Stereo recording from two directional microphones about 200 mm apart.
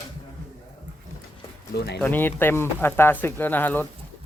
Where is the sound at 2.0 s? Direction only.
10° left (ahead or behind).